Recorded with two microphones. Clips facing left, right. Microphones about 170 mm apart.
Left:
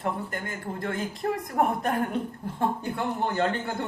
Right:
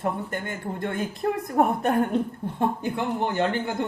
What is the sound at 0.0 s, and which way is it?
Speech, 25° right (ahead or behind).